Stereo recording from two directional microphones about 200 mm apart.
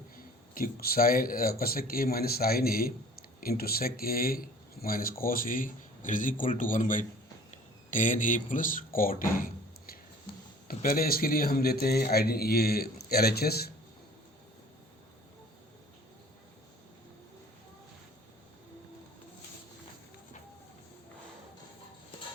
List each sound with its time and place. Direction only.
0.5 s speech: 45° left (ahead or behind)